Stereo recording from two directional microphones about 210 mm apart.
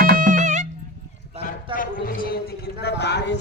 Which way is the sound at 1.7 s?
40° left (ahead or behind).